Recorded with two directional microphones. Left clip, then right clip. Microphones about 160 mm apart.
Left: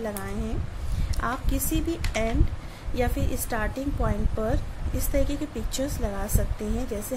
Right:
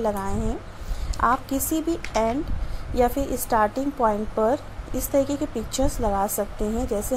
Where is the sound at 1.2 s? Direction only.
15° right (ahead or behind).